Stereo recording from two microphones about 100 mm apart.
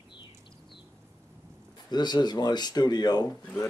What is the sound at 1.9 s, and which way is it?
Speech, 45° left (ahead or behind).